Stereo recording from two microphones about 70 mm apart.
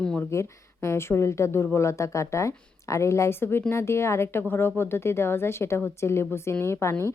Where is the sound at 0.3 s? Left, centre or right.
Left.